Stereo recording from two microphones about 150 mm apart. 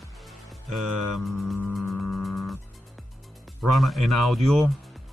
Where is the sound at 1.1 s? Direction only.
Centre (ahead or behind).